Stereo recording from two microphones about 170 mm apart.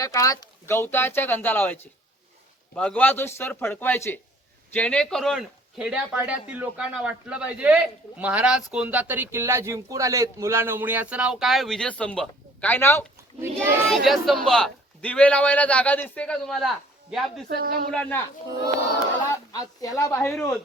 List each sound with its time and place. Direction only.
0.0 s a man's voice: 20° left (ahead or behind)
13.6 s speech: centre (ahead or behind)
17.5 s speech: 60° right (ahead or behind)
17.9 s a man's voice: 10° left (ahead or behind)
19.3 s a woman's voice: 20° left (ahead or behind)